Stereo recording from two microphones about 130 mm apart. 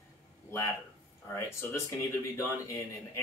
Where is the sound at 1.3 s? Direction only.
25° left (ahead or behind).